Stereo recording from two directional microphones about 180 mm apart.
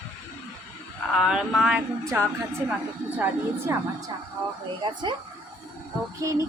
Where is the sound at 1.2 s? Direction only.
Centre (ahead or behind).